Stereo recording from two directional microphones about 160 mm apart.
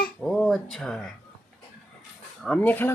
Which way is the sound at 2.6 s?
10° left (ahead or behind).